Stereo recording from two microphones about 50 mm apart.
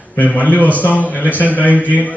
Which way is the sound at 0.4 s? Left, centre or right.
Left.